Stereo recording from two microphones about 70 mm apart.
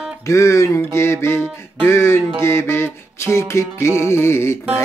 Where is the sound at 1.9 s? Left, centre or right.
Left.